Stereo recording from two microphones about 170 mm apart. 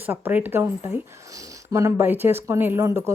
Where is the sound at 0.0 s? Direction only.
10° right (ahead or behind).